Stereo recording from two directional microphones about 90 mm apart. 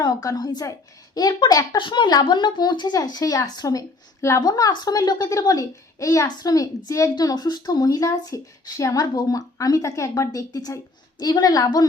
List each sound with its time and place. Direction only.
0.0 s a woman's voice: 45° left (ahead or behind)
1.7 s a woman's voice: 65° left (ahead or behind); by 11.9 s 45° left (ahead or behind)